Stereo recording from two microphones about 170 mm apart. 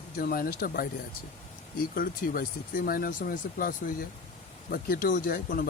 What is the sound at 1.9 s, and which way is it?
Speech, 55° left (ahead or behind).